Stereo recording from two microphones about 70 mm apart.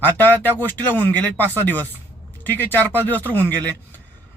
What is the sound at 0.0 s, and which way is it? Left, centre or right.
A man's voice, left.